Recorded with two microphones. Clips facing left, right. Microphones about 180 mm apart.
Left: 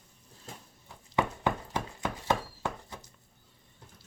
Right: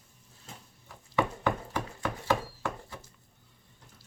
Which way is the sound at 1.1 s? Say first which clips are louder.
Right 1 dB; 20° left (ahead or behind).